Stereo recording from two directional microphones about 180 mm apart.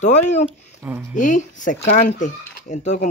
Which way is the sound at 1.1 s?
45° left (ahead or behind).